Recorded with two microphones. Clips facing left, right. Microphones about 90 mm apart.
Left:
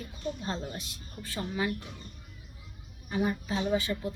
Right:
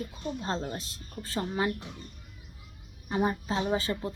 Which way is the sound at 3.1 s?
30° right (ahead or behind).